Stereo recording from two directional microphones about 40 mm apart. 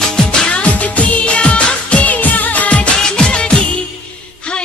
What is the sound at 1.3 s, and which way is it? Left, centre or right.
Music of bollywood, left.